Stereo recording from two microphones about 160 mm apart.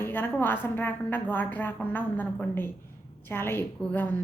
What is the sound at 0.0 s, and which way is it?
A woman's voice, 10° left (ahead or behind).